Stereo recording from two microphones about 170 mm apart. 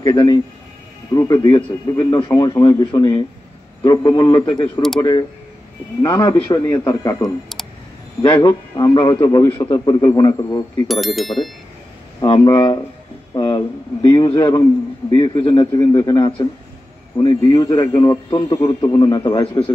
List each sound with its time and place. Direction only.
0.0 s a man's voice: 25° left (ahead or behind)
6.0 s a man's voice: 20° left (ahead or behind)
10.9 s speech: centre (ahead or behind)
12.2 s a man's voice: 25° left (ahead or behind)